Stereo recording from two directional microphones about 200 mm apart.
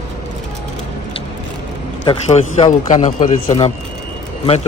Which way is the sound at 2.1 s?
30° left (ahead or behind).